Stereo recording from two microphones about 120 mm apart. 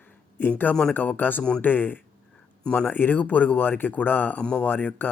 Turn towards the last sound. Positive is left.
turn(degrees=15)  # may be behind; listen again after turning